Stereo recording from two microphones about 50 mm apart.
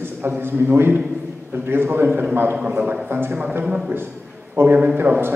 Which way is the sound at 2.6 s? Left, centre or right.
Right.